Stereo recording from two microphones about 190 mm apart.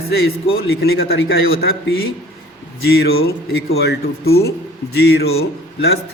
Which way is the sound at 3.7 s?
75° left (ahead or behind).